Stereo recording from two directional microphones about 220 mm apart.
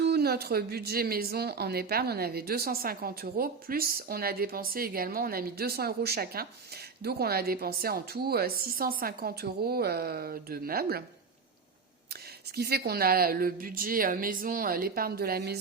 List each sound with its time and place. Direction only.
0.0 s a woman's voice: 45° right (ahead or behind)
12.5 s a woman's voice: 45° right (ahead or behind)